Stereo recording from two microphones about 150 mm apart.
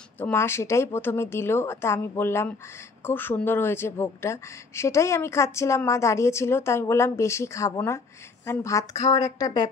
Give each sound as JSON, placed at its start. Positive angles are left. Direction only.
{"t": 0.2, "sound": "a woman's voice", "side_deg": 15}